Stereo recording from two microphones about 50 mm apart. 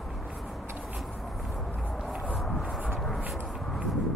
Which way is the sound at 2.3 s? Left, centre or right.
Centre.